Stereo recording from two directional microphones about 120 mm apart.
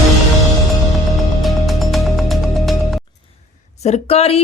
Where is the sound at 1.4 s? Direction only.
Centre (ahead or behind).